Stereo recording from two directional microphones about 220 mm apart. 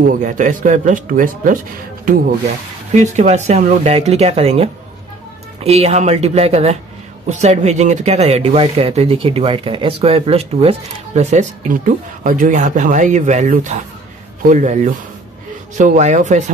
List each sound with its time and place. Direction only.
0.1 s speech: 35° right (ahead or behind)
2.9 s speech: 30° right (ahead or behind)